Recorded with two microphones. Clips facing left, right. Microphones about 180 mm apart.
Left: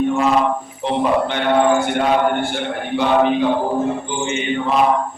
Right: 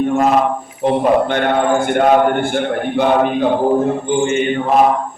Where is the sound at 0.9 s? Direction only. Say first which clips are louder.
Right 4 dB; 50° right (ahead or behind).